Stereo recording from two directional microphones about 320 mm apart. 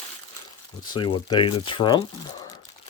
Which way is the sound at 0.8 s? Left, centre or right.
Centre.